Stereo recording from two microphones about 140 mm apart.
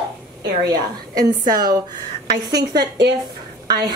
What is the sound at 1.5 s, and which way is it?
A woman's voice, 30° right (ahead or behind).